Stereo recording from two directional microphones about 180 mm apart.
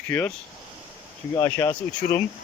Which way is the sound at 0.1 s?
10° left (ahead or behind).